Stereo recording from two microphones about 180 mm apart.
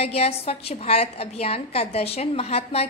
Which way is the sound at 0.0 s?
35° left (ahead or behind).